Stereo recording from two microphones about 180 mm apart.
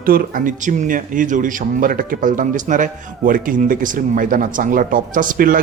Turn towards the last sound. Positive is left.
turn(degrees=-50)  # may be behind; listen again after turning